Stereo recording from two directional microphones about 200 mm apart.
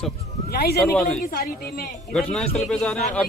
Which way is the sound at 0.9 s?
5° left (ahead or behind).